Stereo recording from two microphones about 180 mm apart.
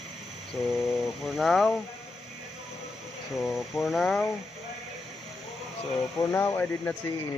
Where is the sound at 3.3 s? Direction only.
Centre (ahead or behind).